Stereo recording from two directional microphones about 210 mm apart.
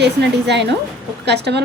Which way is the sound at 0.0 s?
55° right (ahead or behind).